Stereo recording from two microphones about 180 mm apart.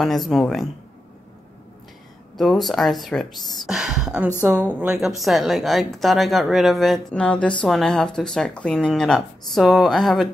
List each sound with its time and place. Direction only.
0.0 s a woman's voice: centre (ahead or behind)
2.3 s a woman's voice: centre (ahead or behind)